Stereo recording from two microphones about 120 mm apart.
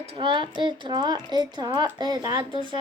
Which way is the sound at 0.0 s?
50° right (ahead or behind).